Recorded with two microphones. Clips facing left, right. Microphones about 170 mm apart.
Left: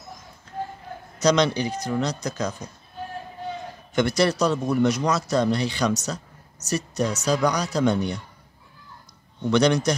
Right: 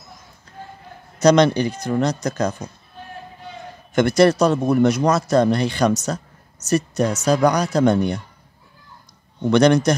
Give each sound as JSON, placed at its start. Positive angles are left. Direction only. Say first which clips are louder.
{"t": 1.2, "sound": "a man's voice", "louder": "right 6 dB", "side_deg": -55}
{"t": 3.9, "sound": "a man's voice", "louder": "right 6 dB", "side_deg": -50}
{"t": 9.5, "sound": "a man's voice", "louder": "right 5 dB", "side_deg": -55}